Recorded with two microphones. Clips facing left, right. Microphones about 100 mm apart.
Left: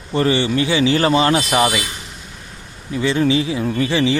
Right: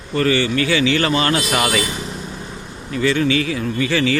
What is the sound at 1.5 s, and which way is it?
Speech, 15° left (ahead or behind).